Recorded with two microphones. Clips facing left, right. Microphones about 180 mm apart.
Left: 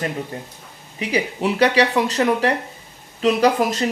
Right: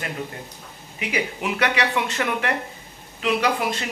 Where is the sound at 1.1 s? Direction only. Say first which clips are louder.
Left 5 dB; 35° left (ahead or behind).